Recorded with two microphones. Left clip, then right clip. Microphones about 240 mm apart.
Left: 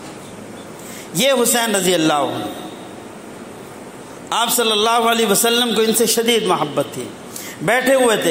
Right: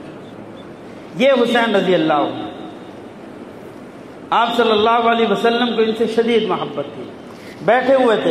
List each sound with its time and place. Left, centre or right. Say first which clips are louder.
1.1 s a man's voice: right 2 dB; left
4.3 s a man's voice: right 3 dB; left
7.6 s a man's voice: right 1 dB; left